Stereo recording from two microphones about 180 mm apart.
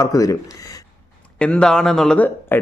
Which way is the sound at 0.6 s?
20° left (ahead or behind).